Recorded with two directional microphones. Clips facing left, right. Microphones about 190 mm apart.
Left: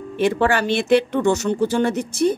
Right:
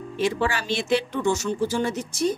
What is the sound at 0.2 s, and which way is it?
Speech, 60° left (ahead or behind).